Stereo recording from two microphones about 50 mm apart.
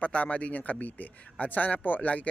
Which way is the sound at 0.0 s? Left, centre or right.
Left.